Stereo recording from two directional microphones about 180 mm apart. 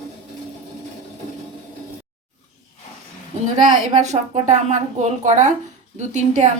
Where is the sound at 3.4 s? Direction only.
40° right (ahead or behind).